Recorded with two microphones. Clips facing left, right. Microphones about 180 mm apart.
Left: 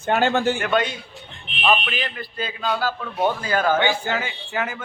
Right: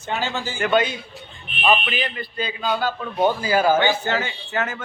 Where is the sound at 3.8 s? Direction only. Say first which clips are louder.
Right 1 dB; 10° left (ahead or behind).